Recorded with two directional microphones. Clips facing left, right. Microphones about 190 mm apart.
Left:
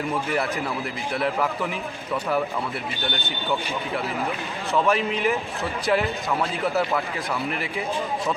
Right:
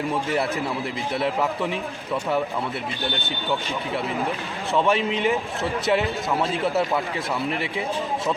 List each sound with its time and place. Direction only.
1.1 s a man's voice: 25° right (ahead or behind)
4.8 s a man's voice: 20° right (ahead or behind)